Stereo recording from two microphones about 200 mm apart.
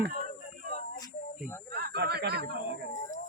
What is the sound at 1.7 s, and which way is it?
Snake, 50° right (ahead or behind).